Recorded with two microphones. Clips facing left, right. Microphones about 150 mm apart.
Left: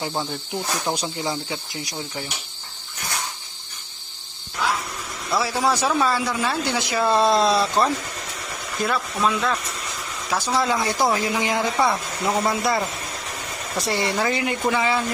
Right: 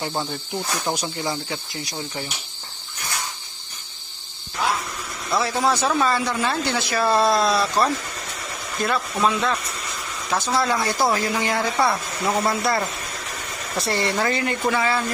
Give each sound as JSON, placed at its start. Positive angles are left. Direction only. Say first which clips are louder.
{"t": 0.0, "sound": "cricket", "louder": "even", "side_deg": 0}
{"t": 1.2, "sound": "speech", "louder": "even", "side_deg": 15}
{"t": 5.3, "sound": "speech", "louder": "even", "side_deg": 5}
{"t": 8.8, "sound": "speech", "louder": "even", "side_deg": 5}
{"t": 9.1, "sound": "cricket", "louder": "right 1 dB", "side_deg": 0}
{"t": 10.2, "sound": "speech", "louder": "even", "side_deg": 10}